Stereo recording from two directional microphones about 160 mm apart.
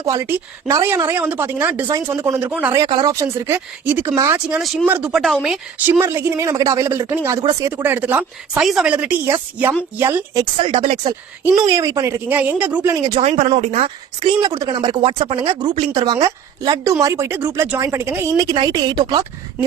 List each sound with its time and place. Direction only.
0.0 s speech: 15° right (ahead or behind)
2.7 s speech: 25° right (ahead or behind); by 5.5 s centre (ahead or behind)
5.8 s speech: 15° right (ahead or behind)
10.6 s speech: 35° right (ahead or behind); by 13.0 s 10° right (ahead or behind)
13.0 s speech: 25° right (ahead or behind)
13.2 s speech: 45° right (ahead or behind)
14.2 s speech: 25° right (ahead or behind)
18.3 s speech: 30° right (ahead or behind)